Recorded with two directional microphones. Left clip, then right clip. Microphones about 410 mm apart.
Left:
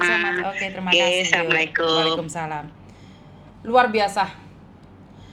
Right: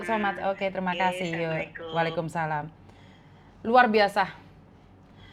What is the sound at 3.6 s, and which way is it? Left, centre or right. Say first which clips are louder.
Speech: left 2 dB; right.